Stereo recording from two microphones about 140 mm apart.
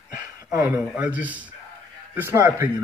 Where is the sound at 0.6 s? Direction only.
10° right (ahead or behind).